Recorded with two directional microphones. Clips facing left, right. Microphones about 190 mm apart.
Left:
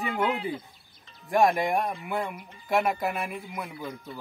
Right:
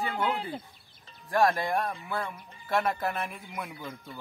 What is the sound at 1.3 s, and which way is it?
Speech, 15° left (ahead or behind).